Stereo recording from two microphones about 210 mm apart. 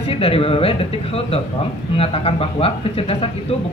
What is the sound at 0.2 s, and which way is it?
Speech, 25° left (ahead or behind).